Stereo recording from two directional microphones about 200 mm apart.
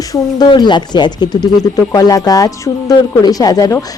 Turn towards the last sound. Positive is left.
turn(degrees=15)  # may be behind; listen again after turning